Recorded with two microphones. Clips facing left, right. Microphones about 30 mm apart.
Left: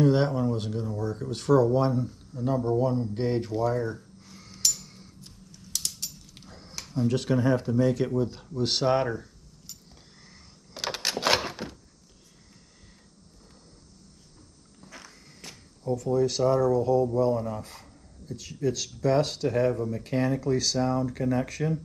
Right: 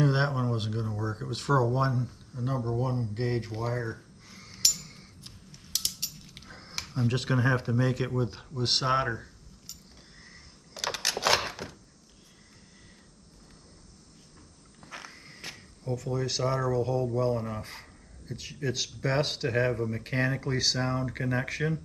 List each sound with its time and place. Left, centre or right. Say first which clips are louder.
0.0 s speech: left 4 dB; centre
2.8 s a sound: left 5 dB; centre
5.2 s a sound: even; right
6.3 s dog: right 1 dB; centre
6.7 s speech: left 3 dB; right
10.7 s a sound: left 1 dB; centre
14.8 s walk: right 3 dB; right
15.1 s walk: right 4 dB; right
16.1 s speech: left 7 dB; centre